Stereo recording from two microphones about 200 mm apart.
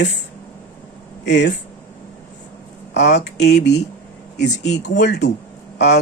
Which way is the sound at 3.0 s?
55° left (ahead or behind).